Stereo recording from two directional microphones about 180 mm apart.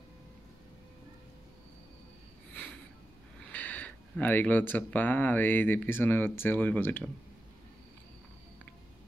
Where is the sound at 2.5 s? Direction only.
10° left (ahead or behind).